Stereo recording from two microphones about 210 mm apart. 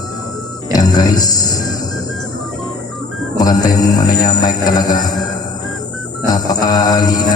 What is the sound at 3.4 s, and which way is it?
Mantra, 15° left (ahead or behind).